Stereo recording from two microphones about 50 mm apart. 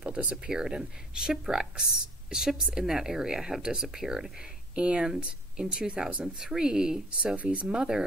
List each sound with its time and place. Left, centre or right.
0.3 s speech: centre
4.7 s speech: right
6.0 s speech: right
6.4 s speech: centre
7.3 s speech: right
7.6 s speech: centre